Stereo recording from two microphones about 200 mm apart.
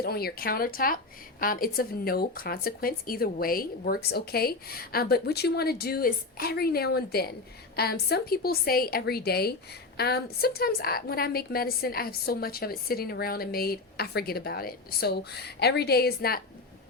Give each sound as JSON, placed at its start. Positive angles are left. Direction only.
{"t": 0.0, "sound": "a woman's voice", "side_deg": 50}